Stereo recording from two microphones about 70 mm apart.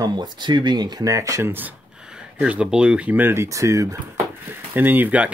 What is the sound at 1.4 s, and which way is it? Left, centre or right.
Speech, right.